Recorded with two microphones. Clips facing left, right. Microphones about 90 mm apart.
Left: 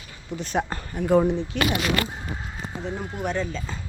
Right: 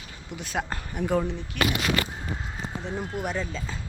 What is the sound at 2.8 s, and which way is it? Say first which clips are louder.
Speech: left 1 dB; centre (ahead or behind).